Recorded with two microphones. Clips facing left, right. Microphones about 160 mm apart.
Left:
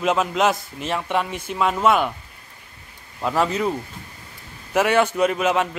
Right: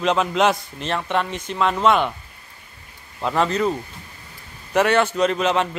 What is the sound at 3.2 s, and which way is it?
A man's voice, 5° left (ahead or behind).